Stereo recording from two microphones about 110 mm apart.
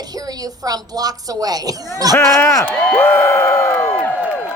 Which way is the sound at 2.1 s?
25° left (ahead or behind).